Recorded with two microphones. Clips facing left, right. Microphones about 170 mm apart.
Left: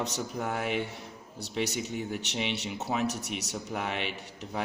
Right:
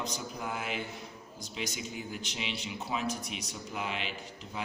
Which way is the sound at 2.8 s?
75° left (ahead or behind).